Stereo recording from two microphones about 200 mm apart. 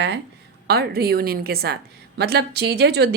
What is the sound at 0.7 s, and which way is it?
A woman's voice, 50° right (ahead or behind).